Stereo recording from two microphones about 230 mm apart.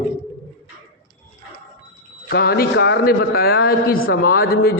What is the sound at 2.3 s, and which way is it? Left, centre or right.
A man's voice, left.